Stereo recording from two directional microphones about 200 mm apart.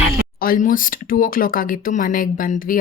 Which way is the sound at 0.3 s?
45° left (ahead or behind).